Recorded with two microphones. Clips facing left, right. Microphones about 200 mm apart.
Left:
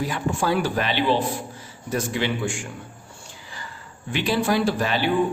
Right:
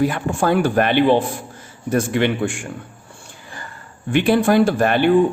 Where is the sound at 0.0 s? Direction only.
55° right (ahead or behind).